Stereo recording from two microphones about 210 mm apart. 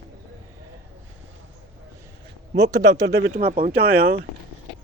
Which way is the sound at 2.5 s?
15° right (ahead or behind).